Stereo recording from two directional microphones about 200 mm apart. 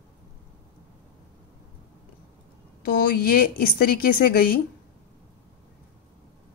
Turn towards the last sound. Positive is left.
turn(degrees=45)  # may be behind; listen again after turning